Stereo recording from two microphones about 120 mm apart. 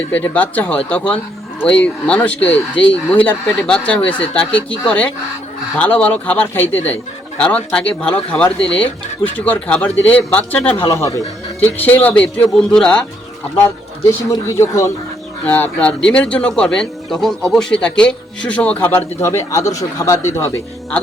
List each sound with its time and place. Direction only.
0.1 s speech: 15° left (ahead or behind)
10.8 s speech: 25° left (ahead or behind)
11.6 s speech: 15° left (ahead or behind)
14.4 s speech: 25° left (ahead or behind)
15.4 s speech: 15° left (ahead or behind)